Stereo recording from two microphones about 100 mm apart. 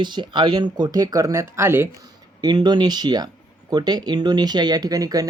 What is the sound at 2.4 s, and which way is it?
Speech, 45° right (ahead or behind).